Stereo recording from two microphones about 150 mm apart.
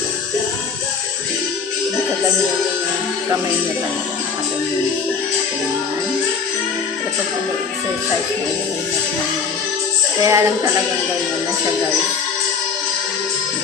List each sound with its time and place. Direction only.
10.2 s music: 20° right (ahead or behind)